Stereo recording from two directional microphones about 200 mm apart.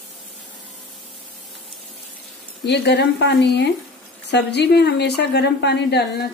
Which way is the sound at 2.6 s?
55° left (ahead or behind).